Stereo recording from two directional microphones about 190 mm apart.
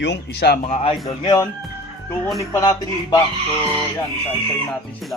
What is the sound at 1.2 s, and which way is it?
Speech, 20° left (ahead or behind).